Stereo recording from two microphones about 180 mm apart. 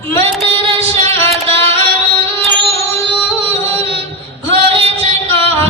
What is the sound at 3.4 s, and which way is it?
Music, 35° right (ahead or behind).